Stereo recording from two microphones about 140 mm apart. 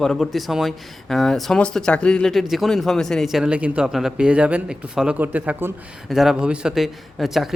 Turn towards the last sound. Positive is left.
turn(degrees=0)  # may be behind; listen again after turning